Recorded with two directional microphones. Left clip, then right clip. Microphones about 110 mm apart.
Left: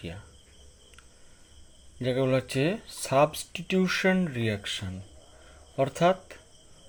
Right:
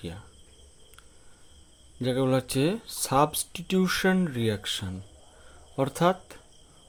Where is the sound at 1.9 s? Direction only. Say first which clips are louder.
Even; 35° right (ahead or behind).